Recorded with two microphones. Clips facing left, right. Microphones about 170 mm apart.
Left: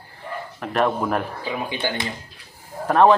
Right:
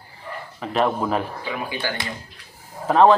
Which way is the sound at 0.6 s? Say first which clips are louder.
Even; centre (ahead or behind).